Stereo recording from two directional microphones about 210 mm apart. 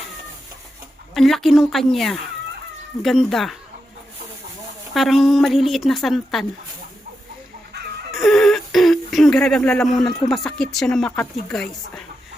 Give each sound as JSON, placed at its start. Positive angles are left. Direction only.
{"t": 1.1, "sound": "a woman's voice", "side_deg": 0}
{"t": 4.9, "sound": "a woman's voice", "side_deg": 0}
{"t": 8.1, "sound": "a sound", "side_deg": 0}
{"t": 10.2, "sound": "a woman's voice", "side_deg": 0}